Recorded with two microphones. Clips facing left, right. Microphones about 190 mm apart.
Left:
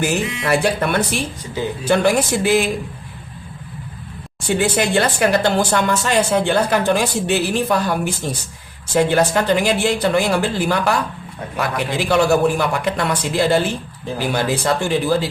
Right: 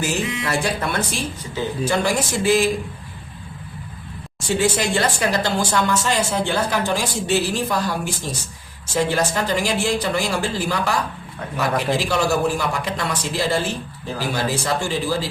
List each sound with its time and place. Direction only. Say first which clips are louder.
0.0 s a man's voice: left 3 dB; 60° left (ahead or behind)
4.4 s a man's voice: left 2 dB; 60° left (ahead or behind)